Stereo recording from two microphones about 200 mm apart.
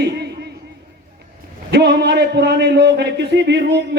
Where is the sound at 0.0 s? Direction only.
55° right (ahead or behind).